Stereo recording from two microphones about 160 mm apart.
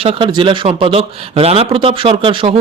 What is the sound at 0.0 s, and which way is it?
Speech, 35° right (ahead or behind).